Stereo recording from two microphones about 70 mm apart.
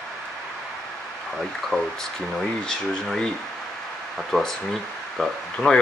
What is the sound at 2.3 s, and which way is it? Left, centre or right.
Speech, centre.